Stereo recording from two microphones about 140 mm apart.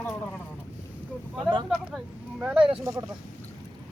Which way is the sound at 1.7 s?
10° right (ahead or behind).